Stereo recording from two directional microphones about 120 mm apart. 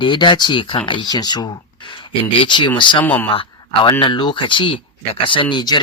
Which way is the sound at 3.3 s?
50° left (ahead or behind).